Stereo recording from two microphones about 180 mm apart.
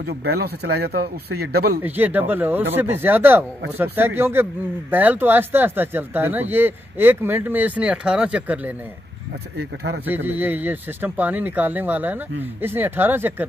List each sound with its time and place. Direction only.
0.0 s speech: 65° right (ahead or behind)
1.8 s speech: 10° right (ahead or behind)
10.0 s speech: 10° right (ahead or behind)